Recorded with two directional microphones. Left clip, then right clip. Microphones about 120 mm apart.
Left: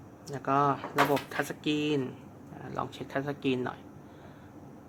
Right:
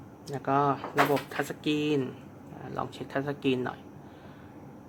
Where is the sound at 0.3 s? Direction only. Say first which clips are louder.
Right 1 dB; centre (ahead or behind).